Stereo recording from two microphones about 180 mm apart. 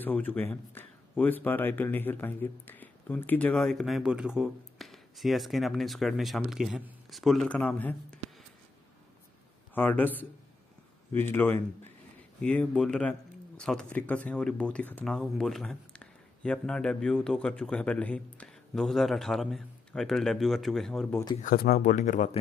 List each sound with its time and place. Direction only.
0.0 s speech: 10° left (ahead or behind)
9.8 s a man's voice: 10° left (ahead or behind)
21.4 s speech: 45° left (ahead or behind)